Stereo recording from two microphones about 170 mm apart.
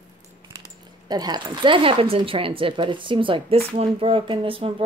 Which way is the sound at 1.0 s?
25° right (ahead or behind).